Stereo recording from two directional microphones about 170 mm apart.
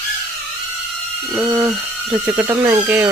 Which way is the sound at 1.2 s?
5° right (ahead or behind).